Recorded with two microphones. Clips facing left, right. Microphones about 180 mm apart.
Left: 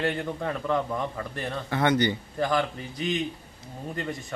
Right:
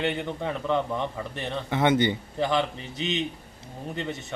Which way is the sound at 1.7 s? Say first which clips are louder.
Right 1 dB; 20° right (ahead or behind).